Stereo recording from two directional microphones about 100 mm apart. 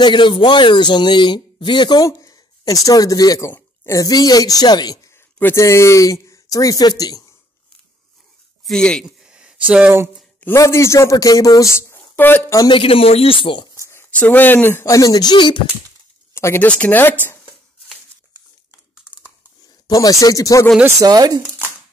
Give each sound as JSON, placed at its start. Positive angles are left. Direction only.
{"t": 0.0, "sound": "speech", "side_deg": 50}
{"t": 2.0, "sound": "speech", "side_deg": 35}
{"t": 5.1, "sound": "speech", "side_deg": 25}
{"t": 8.6, "sound": "speech", "side_deg": 5}
{"t": 9.0, "sound": "a sound", "side_deg": -5}
{"t": 9.7, "sound": "speech", "side_deg": -15}
{"t": 10.6, "sound": "speech", "side_deg": 30}
{"t": 12.7, "sound": "speech", "side_deg": 65}
{"t": 13.8, "sound": "speech", "side_deg": 20}
{"t": 14.9, "sound": "speech", "side_deg": 35}
{"t": 16.3, "sound": "speech", "side_deg": 25}
{"t": 16.6, "sound": "speech", "side_deg": 15}
{"t": 19.9, "sound": "speech", "side_deg": 35}
{"t": 21.0, "sound": "speech", "side_deg": -40}